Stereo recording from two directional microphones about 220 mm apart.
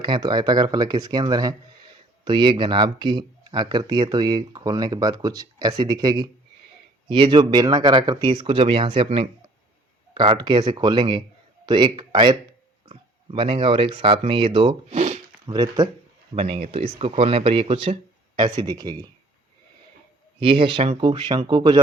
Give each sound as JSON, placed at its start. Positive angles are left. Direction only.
{"t": 0.0, "sound": "speech", "side_deg": -20}
{"t": 15.4, "sound": "speech", "side_deg": -20}
{"t": 20.4, "sound": "speech", "side_deg": -25}